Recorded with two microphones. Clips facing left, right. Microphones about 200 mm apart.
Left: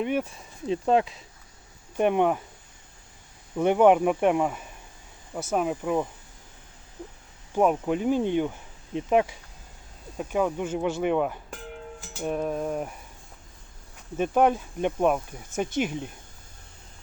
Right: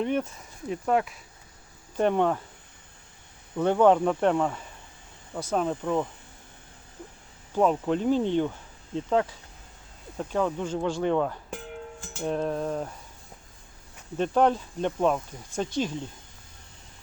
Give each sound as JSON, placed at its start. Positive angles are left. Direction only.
{"t": 0.0, "sound": "speech", "side_deg": 10}
{"t": 0.7, "sound": "speech", "side_deg": 25}
{"t": 2.0, "sound": "speech", "side_deg": 15}
{"t": 3.6, "sound": "speech", "side_deg": 15}
{"t": 7.5, "sound": "speech", "side_deg": 10}
{"t": 14.2, "sound": "speech", "side_deg": 10}